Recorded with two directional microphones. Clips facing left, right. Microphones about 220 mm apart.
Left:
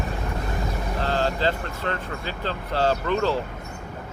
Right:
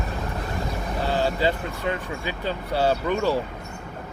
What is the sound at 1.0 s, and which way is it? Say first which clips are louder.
Speech: right 1 dB; 10° right (ahead or behind).